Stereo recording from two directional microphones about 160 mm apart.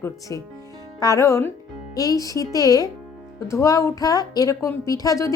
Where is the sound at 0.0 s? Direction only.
20° left (ahead or behind).